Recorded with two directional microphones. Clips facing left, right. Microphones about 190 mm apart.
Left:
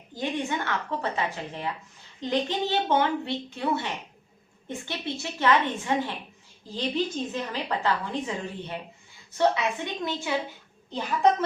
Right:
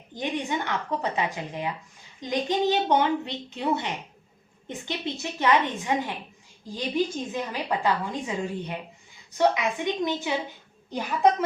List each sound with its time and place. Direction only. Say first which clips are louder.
0.1 s a woman's voice: even; 15° right (ahead or behind)
4.9 s a woman's voice: right 3 dB; 15° right (ahead or behind)
9.4 s a woman's voice: right 1 dB; 15° right (ahead or behind)